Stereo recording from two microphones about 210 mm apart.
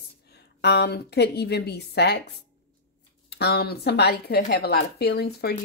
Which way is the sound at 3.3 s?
50° left (ahead or behind).